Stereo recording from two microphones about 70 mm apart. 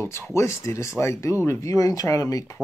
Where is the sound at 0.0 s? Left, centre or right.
Left.